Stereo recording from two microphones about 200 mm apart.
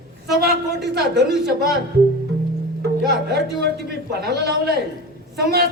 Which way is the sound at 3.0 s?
55° right (ahead or behind).